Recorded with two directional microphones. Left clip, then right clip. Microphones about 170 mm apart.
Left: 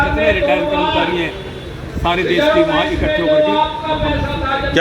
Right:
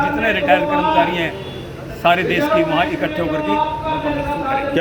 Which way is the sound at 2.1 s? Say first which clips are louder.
Right 1 dB; 20° right (ahead or behind).